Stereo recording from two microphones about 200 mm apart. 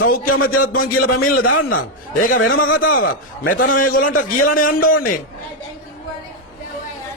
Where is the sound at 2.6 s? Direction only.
75° left (ahead or behind).